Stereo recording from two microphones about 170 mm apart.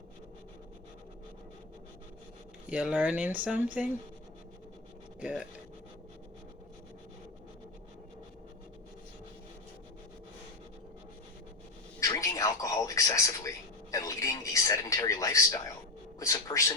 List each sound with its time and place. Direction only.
2.6 s speech: 5° right (ahead or behind)
5.2 s speech: 5° right (ahead or behind)
11.9 s a sound: 20° left (ahead or behind)
16.2 s cat: 20° left (ahead or behind)